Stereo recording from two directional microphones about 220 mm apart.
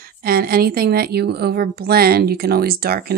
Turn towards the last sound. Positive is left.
turn(degrees=-45)  # may be behind; listen again after turning